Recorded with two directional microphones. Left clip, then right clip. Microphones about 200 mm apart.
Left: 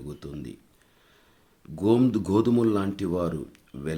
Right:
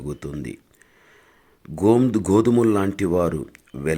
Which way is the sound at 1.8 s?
25° right (ahead or behind).